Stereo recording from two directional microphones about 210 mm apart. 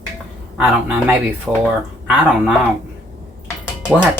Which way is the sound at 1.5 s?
5° right (ahead or behind).